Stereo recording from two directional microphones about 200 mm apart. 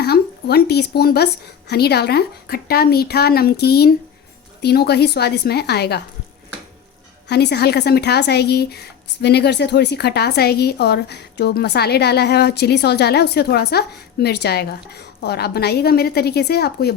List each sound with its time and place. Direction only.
0.0 s a woman's voice: 55° left (ahead or behind)
7.3 s speech: 55° left (ahead or behind)